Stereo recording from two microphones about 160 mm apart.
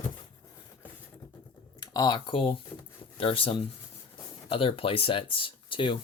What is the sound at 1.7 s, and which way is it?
Speech, 25° left (ahead or behind).